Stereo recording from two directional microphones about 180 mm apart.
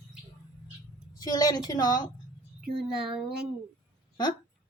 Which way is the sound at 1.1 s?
20° left (ahead or behind).